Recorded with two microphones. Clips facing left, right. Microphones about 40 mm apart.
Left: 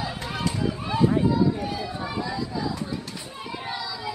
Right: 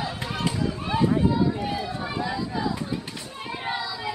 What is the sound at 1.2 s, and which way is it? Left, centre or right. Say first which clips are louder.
Run: left 1 dB; centre.